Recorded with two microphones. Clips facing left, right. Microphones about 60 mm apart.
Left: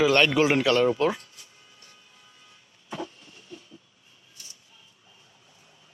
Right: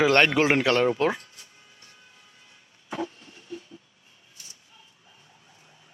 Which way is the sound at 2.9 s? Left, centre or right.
Right.